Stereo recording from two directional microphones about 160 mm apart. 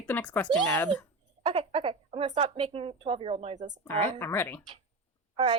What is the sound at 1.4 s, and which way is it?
A woman's voice, 35° right (ahead or behind).